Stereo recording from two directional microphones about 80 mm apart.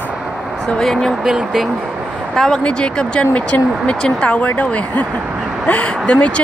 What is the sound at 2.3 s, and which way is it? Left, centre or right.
Speech, centre.